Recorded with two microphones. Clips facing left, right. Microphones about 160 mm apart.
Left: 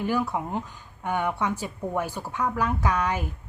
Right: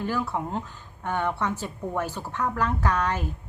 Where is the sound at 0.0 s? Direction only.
15° left (ahead or behind).